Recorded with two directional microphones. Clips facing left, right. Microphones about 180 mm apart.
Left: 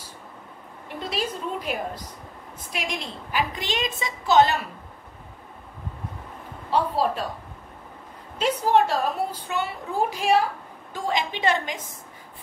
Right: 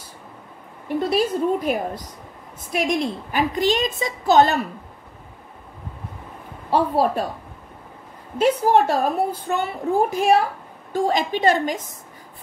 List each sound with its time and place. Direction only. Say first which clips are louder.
1.1 s a woman's voice: right 8 dB; 45° right (ahead or behind)
6.7 s a woman's voice: right 4 dB; 55° right (ahead or behind)
8.4 s a woman's voice: right 4 dB; 50° right (ahead or behind)